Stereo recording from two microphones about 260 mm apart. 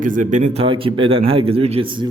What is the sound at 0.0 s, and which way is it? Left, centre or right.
A man's voice, right.